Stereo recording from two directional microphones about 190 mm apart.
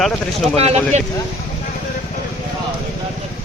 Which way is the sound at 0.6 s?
35° right (ahead or behind).